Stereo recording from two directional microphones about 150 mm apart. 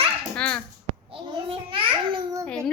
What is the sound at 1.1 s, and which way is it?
A child's voice, 35° right (ahead or behind).